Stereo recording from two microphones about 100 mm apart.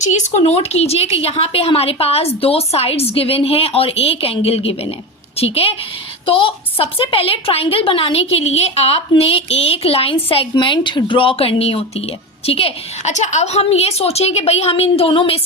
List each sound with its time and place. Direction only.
0.4 s a woman's voice: 90° left
6.2 s a woman's voice: 60° left (ahead or behind)
10.5 s speech: 50° left (ahead or behind); by 12.0 s 85° left
12.5 s a woman's voice: 70° left (ahead or behind)
13.5 s a woman's voice: 90° left; by 15.4 s 60° left (ahead or behind)